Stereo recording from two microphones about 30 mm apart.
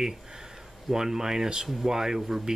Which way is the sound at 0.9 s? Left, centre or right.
Centre.